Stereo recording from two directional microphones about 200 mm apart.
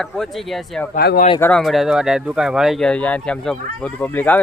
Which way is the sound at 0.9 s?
50° left (ahead or behind).